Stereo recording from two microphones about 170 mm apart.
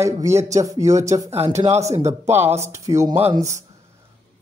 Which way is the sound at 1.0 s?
45° right (ahead or behind).